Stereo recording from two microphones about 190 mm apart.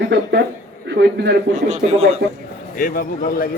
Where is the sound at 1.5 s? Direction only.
35° right (ahead or behind).